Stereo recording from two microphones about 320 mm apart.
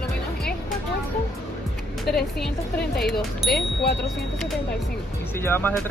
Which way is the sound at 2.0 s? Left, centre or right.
Centre.